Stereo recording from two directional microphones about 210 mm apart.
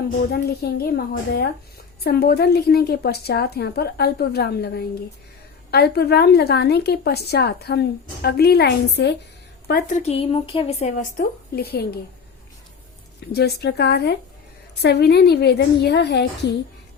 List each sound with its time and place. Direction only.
0.3 s a woman's voice: 50° left (ahead or behind)
9.6 s speech: 40° left (ahead or behind)
13.3 s a woman's voice: 50° left (ahead or behind)